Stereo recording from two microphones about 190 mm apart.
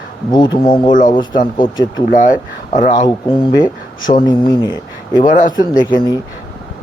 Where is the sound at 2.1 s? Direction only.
45° left (ahead or behind).